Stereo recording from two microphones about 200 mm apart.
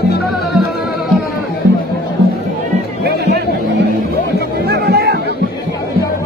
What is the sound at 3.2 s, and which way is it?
Music, 55° right (ahead or behind).